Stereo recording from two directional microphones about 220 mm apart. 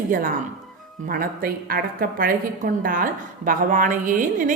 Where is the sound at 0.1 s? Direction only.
40° right (ahead or behind).